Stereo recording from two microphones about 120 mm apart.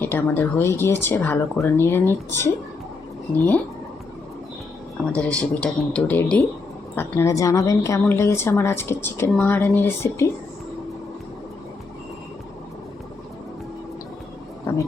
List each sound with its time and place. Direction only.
0.0 s a woman's voice: 15° left (ahead or behind)
5.1 s a woman's voice: 10° left (ahead or behind)
14.7 s a sound: 20° left (ahead or behind)